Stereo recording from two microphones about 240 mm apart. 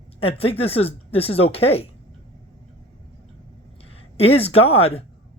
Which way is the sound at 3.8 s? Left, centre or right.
Left.